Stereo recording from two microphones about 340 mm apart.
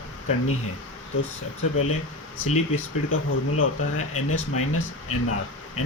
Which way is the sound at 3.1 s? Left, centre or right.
Left.